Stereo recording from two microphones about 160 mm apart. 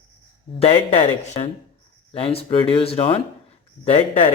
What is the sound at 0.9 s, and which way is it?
Speech, 45° left (ahead or behind).